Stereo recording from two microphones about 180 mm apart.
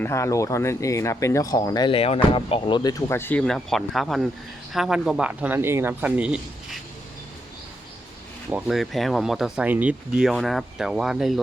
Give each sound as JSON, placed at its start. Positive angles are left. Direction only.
{"t": 0.0, "sound": "speech", "side_deg": 15}
{"t": 8.6, "sound": "speech", "side_deg": 0}